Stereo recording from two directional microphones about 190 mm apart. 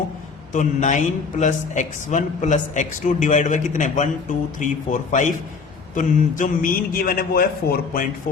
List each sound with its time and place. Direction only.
0.5 s a man's voice: 40° left (ahead or behind)